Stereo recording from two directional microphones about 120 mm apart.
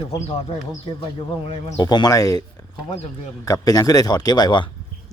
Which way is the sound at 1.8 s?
35° left (ahead or behind).